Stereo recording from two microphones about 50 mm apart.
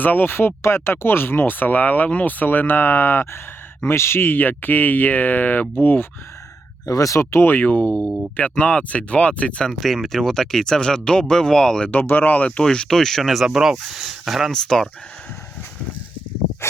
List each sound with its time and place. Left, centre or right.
0.0 s speech: left
6.8 s speech: left
7.6 s speech: left
9.8 s speech: centre
11.9 s speech: left
12.6 s speech: centre
14.5 s speech: centre